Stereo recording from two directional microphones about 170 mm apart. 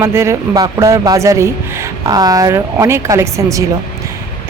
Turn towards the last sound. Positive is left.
turn(degrees=-20)  # may be behind; listen again after turning